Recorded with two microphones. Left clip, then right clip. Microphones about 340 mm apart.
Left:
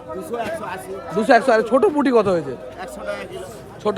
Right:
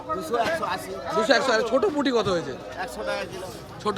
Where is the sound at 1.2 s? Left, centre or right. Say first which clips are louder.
Left 6 dB; centre.